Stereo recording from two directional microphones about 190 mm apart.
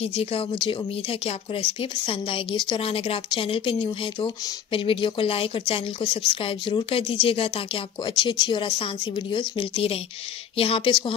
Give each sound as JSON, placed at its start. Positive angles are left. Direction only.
{"t": 0.0, "sound": "speech", "side_deg": 30}